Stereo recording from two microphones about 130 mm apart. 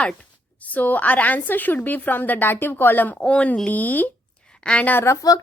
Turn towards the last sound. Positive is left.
turn(degrees=15)  # may be behind; listen again after turning